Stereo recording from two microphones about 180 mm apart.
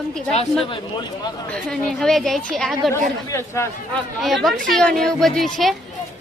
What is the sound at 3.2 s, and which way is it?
Speech, 15° left (ahead or behind).